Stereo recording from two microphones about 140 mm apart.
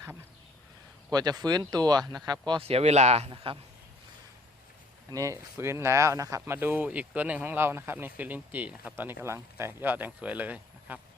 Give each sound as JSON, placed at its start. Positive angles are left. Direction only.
{"t": 1.1, "sound": "speech", "side_deg": -30}
{"t": 2.5, "sound": "speech", "side_deg": -45}
{"t": 5.1, "sound": "speech", "side_deg": -25}